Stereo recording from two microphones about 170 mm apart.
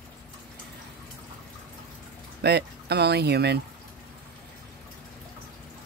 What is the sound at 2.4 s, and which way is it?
Speech, 75° right (ahead or behind).